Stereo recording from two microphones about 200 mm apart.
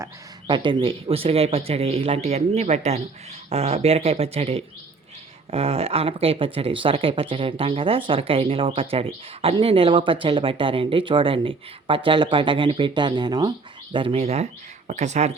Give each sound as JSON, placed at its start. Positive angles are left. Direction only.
{"t": 0.0, "sound": "speech", "side_deg": -25}